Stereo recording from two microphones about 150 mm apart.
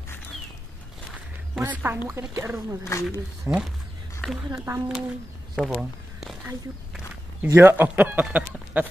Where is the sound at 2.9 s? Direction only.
20° left (ahead or behind).